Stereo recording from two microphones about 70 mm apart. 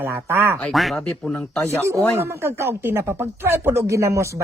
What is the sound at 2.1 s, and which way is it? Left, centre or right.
Speech, right.